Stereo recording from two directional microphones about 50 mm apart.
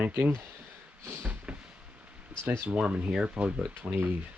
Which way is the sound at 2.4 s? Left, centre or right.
Right.